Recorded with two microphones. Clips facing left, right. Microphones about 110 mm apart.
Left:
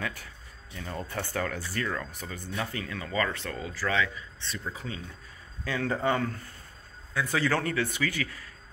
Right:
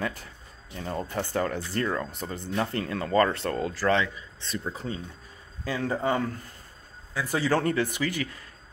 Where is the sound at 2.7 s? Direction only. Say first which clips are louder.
Right 7 dB; 50° right (ahead or behind).